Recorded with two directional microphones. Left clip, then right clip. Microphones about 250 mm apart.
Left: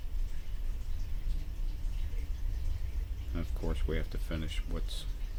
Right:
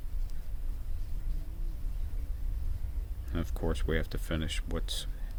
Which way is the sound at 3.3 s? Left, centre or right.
Right.